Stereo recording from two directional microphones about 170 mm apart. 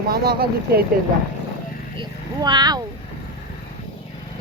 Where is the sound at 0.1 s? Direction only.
65° right (ahead or behind).